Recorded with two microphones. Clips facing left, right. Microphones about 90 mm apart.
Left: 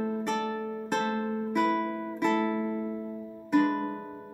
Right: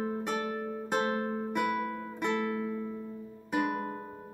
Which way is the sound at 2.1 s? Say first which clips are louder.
Left 5 dB; 5° right (ahead or behind).